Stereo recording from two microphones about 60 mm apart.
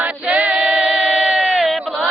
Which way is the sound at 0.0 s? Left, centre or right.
Right.